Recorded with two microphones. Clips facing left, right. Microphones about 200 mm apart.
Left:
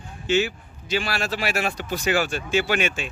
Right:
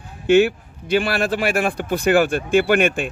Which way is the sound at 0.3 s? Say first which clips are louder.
Right 8 dB; 55° right (ahead or behind).